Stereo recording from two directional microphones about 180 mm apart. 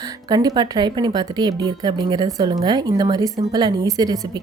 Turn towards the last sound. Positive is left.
turn(degrees=-20)  # may be behind; listen again after turning